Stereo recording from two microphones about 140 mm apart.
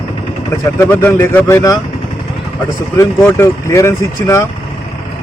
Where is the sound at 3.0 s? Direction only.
20° left (ahead or behind).